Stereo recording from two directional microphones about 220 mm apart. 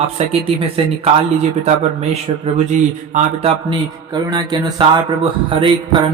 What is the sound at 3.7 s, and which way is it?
A man's voice, 20° right (ahead or behind).